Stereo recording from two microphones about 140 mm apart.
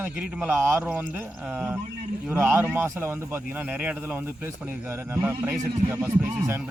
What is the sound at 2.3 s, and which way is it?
A man's voice, 15° right (ahead or behind).